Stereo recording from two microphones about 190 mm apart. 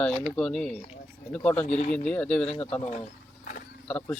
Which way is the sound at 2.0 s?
5° left (ahead or behind).